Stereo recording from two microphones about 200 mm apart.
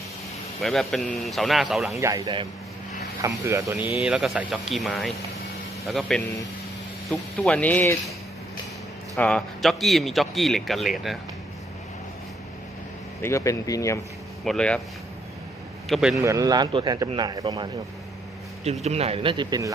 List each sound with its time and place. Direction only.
0.6 s speech: centre (ahead or behind)
2.0 s speech: 15° right (ahead or behind); by 7.9 s 10° left (ahead or behind)
9.1 s speech: 5° left (ahead or behind)
13.2 s speech: 15° left (ahead or behind)
14.4 s speech: 5° left (ahead or behind)
15.9 s speech: centre (ahead or behind)
16.2 s speech: 15° right (ahead or behind)
18.6 s speech: 35° right (ahead or behind)